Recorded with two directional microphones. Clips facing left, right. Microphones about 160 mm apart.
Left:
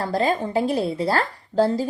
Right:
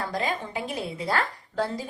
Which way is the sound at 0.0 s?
35° left (ahead or behind).